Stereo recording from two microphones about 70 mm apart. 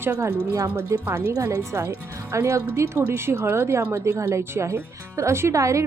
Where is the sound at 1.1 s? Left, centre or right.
Right.